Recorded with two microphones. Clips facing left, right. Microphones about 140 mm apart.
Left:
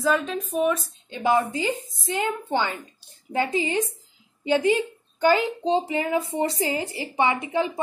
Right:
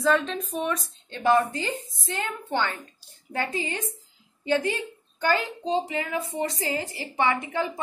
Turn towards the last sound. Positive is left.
turn(degrees=20)  # may be behind; listen again after turning